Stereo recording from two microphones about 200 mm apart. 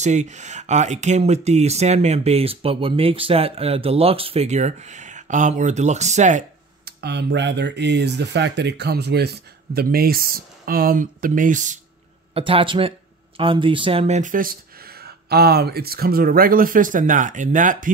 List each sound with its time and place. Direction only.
0.0 s speech: 35° right (ahead or behind)
6.8 s speech: 55° right (ahead or behind); by 11.8 s 40° right (ahead or behind)
12.4 s speech: 25° right (ahead or behind)